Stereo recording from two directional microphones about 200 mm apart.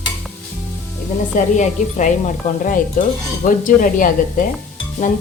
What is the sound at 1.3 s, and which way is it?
Speech, 40° left (ahead or behind).